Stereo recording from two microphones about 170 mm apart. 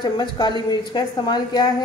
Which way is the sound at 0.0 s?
25° left (ahead or behind).